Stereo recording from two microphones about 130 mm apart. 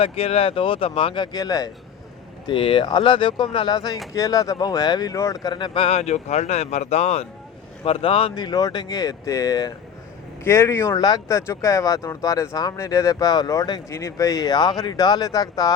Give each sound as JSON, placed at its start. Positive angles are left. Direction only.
{"t": 0.0, "sound": "speech", "side_deg": 50}
{"t": 2.5, "sound": "speech", "side_deg": 40}
{"t": 8.4, "sound": "speech", "side_deg": 30}